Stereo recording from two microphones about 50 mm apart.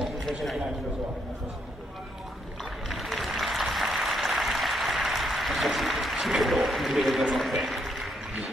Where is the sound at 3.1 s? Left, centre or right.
Centre.